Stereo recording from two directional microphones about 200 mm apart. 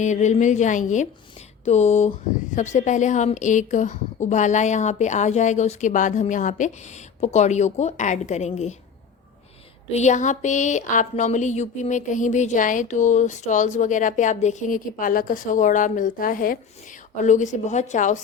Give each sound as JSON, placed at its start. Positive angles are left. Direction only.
{"t": 0.0, "sound": "speech", "side_deg": 35}
{"t": 9.9, "sound": "speech", "side_deg": 35}